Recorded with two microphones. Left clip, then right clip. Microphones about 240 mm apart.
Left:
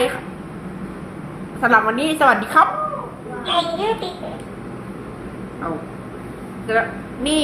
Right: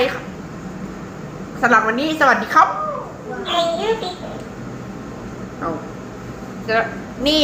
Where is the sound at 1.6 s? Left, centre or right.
Centre.